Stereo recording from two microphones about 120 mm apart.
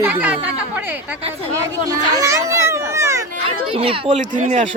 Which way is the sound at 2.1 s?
25° right (ahead or behind).